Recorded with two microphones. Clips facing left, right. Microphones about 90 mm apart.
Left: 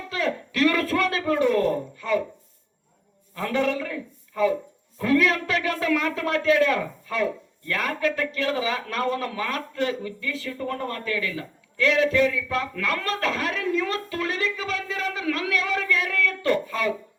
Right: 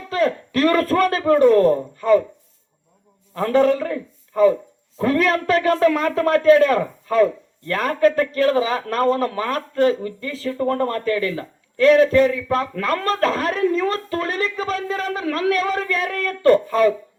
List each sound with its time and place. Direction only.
0.1 s a man's voice: 40° right (ahead or behind)
3.3 s a man's voice: 40° right (ahead or behind)